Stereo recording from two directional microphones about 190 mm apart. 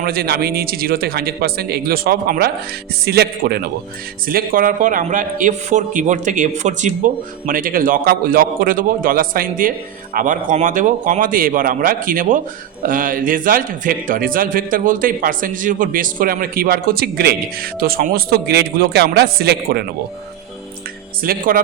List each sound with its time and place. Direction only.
0.0 s a man's voice: 55° right (ahead or behind)
21.2 s a man's voice: 50° right (ahead or behind)